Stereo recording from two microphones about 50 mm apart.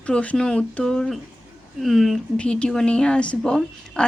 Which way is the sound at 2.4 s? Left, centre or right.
Centre.